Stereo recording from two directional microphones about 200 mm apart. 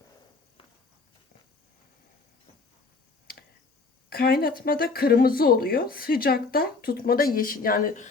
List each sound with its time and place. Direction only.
4.1 s speech: 50° left (ahead or behind)